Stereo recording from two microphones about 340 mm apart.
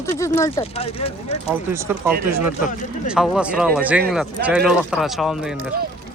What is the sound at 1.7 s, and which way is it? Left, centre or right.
Speech, centre.